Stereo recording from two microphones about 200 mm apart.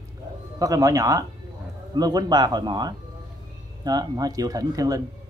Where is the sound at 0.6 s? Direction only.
15° right (ahead or behind).